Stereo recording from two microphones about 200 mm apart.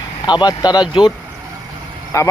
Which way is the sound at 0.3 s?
20° left (ahead or behind).